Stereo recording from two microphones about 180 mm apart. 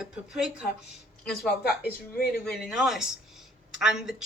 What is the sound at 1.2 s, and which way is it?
Speech, 60° left (ahead or behind).